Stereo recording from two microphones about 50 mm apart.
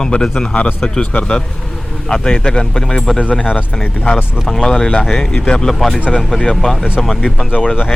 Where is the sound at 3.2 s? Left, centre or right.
Left.